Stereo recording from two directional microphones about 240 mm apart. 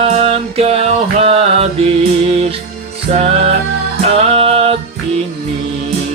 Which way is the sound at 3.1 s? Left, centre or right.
Right.